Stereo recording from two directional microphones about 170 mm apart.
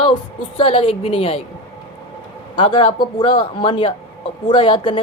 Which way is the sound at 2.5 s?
30° left (ahead or behind).